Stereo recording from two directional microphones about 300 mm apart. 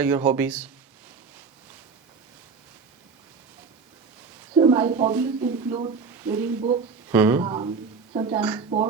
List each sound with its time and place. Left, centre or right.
0.0 s speech: centre
4.5 s speech: centre
6.6 s speech: right
7.1 s speech: centre